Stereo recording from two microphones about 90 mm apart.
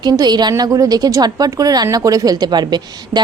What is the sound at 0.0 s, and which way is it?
A woman's voice, 50° right (ahead or behind).